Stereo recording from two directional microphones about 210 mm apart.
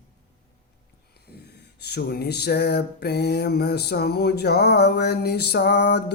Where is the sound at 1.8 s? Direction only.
50° left (ahead or behind).